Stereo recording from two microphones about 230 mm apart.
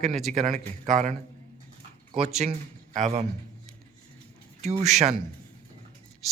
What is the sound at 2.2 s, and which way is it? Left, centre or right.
Speech, right.